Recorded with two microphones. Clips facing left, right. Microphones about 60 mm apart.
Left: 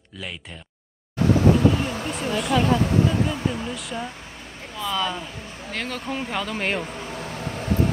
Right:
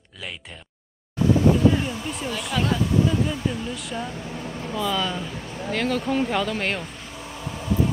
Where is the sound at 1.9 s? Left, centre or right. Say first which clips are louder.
Left 3 dB; left.